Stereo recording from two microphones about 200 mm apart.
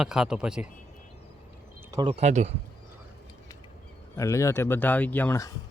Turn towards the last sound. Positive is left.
turn(degrees=15)  # may be behind; listen again after turning